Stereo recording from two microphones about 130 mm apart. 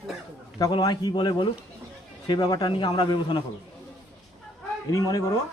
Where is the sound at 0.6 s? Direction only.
30° left (ahead or behind).